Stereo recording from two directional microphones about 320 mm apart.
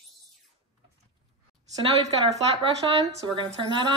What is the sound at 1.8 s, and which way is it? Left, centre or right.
Speech, centre.